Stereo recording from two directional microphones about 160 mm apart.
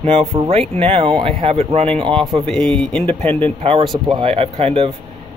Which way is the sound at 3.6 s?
35° right (ahead or behind).